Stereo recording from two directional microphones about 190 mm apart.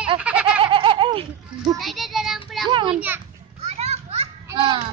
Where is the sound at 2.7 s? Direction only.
25° right (ahead or behind).